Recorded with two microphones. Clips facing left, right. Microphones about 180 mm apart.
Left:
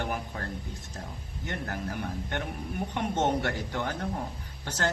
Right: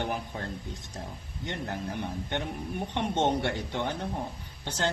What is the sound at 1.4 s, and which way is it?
A man's voice, 25° right (ahead or behind).